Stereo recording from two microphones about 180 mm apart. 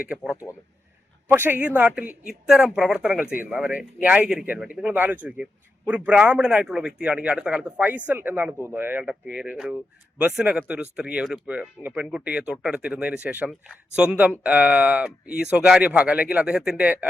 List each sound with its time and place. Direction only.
0.1 s a man's voice: 5° right (ahead or behind)